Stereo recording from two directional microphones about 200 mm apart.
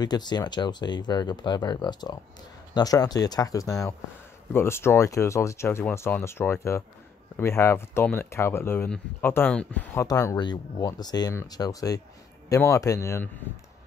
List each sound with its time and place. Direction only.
0.0 s speech: 20° left (ahead or behind)